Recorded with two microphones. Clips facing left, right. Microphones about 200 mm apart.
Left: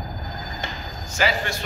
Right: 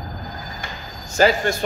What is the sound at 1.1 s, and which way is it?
Speech, 40° right (ahead or behind).